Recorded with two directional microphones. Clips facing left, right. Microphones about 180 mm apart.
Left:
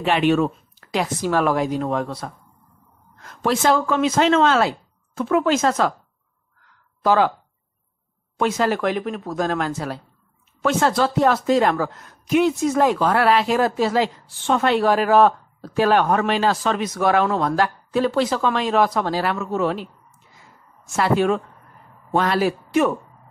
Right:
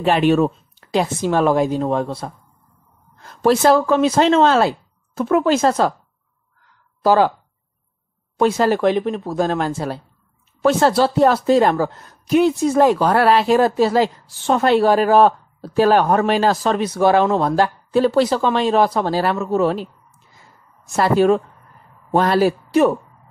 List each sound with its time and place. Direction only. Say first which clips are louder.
0.0 s speech: right 3 dB; 40° right (ahead or behind)
7.0 s speech: right 3 dB; 35° right (ahead or behind)
8.4 s speech: right 4 dB; 35° right (ahead or behind)